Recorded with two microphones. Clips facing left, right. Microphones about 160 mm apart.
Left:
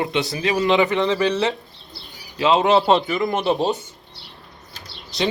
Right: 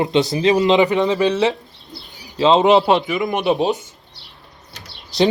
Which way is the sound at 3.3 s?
15° right (ahead or behind).